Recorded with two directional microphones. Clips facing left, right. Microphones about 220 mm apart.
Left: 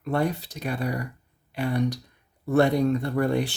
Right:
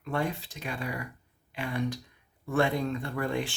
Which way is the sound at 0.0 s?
40° left (ahead or behind).